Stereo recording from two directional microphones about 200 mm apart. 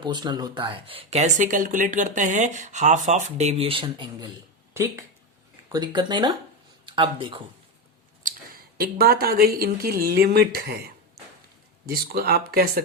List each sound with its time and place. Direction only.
0.0 s speech: 20° right (ahead or behind)
8.8 s speech: 50° right (ahead or behind)